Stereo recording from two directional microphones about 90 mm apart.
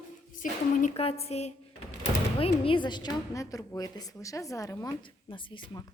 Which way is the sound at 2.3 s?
90° left.